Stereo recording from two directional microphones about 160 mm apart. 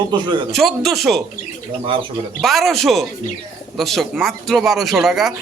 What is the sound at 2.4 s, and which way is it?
Speech, centre (ahead or behind).